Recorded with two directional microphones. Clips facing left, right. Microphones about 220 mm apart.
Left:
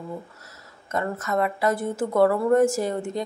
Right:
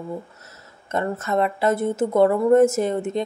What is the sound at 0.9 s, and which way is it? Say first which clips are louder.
Speech: right 3 dB; 25° right (ahead or behind).